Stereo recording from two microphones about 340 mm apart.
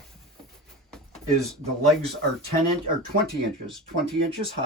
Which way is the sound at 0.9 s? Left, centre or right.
Centre.